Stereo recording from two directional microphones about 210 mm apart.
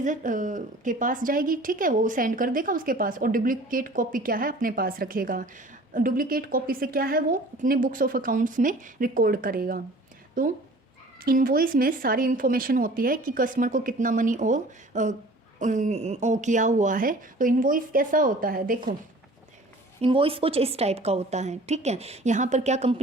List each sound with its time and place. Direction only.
0.0 s a woman's voice: 40° right (ahead or behind)
11.2 s a woman's voice: 45° right (ahead or behind)
20.0 s a woman's voice: 25° right (ahead or behind)